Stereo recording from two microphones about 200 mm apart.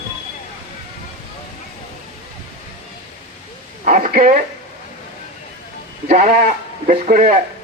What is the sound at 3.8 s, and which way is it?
Speech, 40° right (ahead or behind).